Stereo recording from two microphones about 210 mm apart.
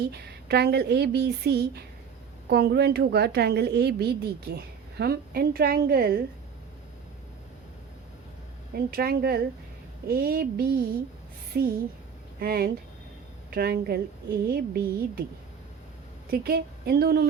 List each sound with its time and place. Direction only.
0.1 s a woman's voice: 50° right (ahead or behind)
8.7 s a woman's voice: 45° right (ahead or behind)
16.3 s a woman's voice: 45° right (ahead or behind)